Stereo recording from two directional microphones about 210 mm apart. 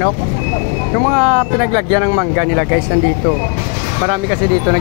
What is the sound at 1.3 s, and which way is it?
Speech, 30° right (ahead or behind).